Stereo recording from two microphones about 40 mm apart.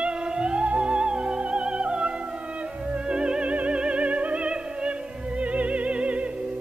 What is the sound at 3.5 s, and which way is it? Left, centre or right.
Music, right.